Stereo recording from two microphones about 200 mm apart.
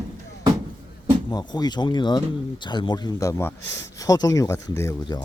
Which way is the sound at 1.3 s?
20° left (ahead or behind).